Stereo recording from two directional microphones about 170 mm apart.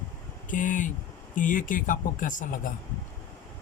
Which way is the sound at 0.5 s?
50° left (ahead or behind).